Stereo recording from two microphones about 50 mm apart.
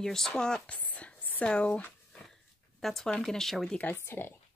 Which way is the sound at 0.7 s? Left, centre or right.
Left.